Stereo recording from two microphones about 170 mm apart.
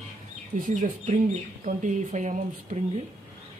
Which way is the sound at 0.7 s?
50° right (ahead or behind).